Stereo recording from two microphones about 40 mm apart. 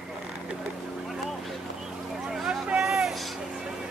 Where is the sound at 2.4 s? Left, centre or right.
Centre.